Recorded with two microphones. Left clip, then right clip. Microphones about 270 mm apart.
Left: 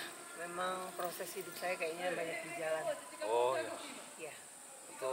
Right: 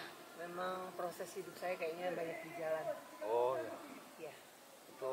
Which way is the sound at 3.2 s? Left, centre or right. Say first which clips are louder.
Left 2 dB; right.